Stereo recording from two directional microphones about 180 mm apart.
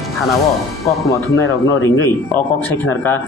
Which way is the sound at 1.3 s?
15° left (ahead or behind).